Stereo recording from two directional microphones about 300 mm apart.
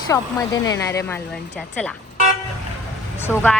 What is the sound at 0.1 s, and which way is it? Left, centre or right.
Speech, centre.